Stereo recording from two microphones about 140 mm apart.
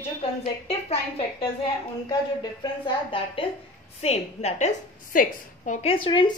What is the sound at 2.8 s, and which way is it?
Speech, 40° left (ahead or behind).